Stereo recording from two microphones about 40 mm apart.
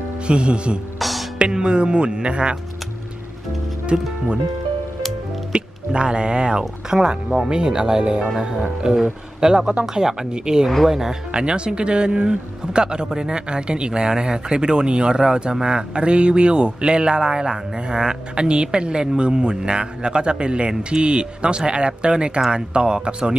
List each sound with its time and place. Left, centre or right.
0.3 s speech: right
0.9 s music: centre
1.4 s speech: right
5.5 s speech: right
11.3 s speech: right